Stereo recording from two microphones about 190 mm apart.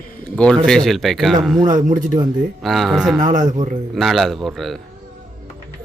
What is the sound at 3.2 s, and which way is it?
Speech, 40° right (ahead or behind).